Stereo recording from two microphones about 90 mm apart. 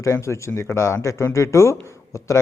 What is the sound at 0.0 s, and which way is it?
A man's voice, 30° left (ahead or behind).